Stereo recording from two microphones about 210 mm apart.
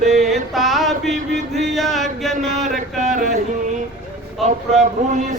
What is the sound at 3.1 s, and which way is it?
Speech, 35° right (ahead or behind).